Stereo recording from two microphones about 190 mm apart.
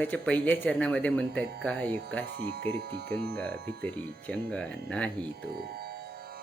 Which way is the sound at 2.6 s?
55° right (ahead or behind).